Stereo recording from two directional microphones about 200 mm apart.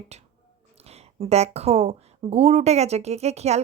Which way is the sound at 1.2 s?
30° right (ahead or behind).